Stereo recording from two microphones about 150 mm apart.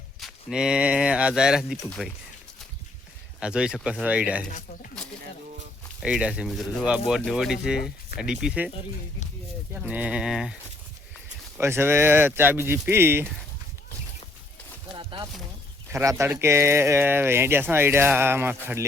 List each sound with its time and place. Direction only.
0.2 s speech: centre (ahead or behind)
3.4 s speech: 5° right (ahead or behind)
4.4 s speech: 60° left (ahead or behind)
6.0 s speech: 5° right (ahead or behind)
9.7 s speech: 10° right (ahead or behind)
11.5 s speech: 15° right (ahead or behind)
14.9 s a sound: 30° right (ahead or behind)
15.9 s speech: 20° right (ahead or behind)